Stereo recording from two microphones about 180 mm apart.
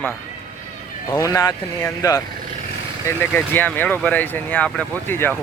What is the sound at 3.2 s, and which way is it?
Speech, 10° left (ahead or behind).